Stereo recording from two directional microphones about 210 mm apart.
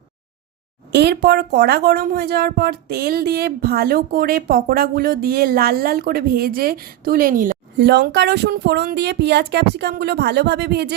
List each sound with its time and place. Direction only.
0.9 s a woman's voice: 50° right (ahead or behind)